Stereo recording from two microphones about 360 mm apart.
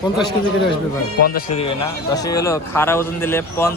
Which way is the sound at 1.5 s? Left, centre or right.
Centre.